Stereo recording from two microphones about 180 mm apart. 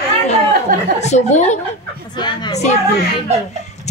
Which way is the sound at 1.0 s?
40° left (ahead or behind).